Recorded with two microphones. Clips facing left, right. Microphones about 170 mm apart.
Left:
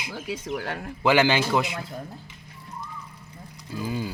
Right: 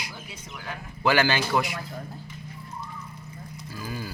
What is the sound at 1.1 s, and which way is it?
Speech, 15° left (ahead or behind).